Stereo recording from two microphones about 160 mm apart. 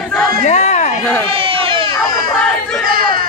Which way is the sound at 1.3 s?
35° right (ahead or behind).